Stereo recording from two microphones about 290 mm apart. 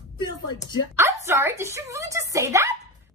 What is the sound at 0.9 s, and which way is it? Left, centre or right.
A woman's voice, centre.